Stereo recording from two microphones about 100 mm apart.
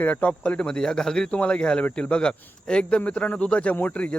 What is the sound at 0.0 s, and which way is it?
Speech, 15° left (ahead or behind).